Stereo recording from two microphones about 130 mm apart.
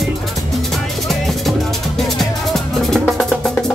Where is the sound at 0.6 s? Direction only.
Centre (ahead or behind).